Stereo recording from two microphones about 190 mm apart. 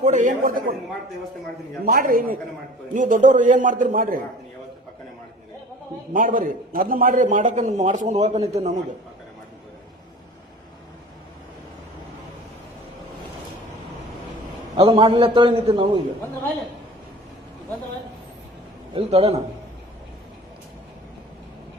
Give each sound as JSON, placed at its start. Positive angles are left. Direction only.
{"t": 0.0, "sound": "speech", "side_deg": -40}
{"t": 1.8, "sound": "speech", "side_deg": -50}
{"t": 6.1, "sound": "a man's voice", "side_deg": -45}
{"t": 14.8, "sound": "a man's voice", "side_deg": -30}
{"t": 18.9, "sound": "a man's voice", "side_deg": -30}